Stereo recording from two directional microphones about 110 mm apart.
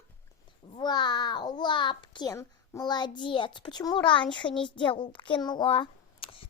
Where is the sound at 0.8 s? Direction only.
40° left (ahead or behind).